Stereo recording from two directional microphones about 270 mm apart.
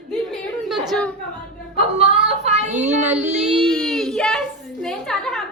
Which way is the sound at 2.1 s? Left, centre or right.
Right.